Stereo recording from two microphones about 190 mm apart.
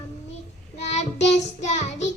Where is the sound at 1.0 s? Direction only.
35° left (ahead or behind).